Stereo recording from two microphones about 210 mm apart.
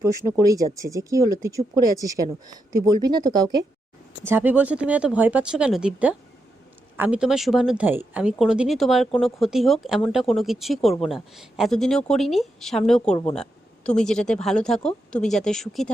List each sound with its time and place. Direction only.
0.0 s a woman's voice: 15° right (ahead or behind); by 15.9 s centre (ahead or behind)